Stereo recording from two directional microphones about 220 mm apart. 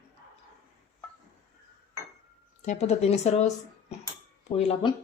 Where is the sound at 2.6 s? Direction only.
30° left (ahead or behind).